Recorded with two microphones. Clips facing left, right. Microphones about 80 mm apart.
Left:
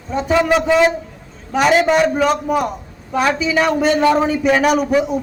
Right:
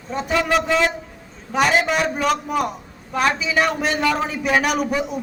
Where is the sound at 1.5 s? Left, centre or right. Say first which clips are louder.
Left 5 dB; centre.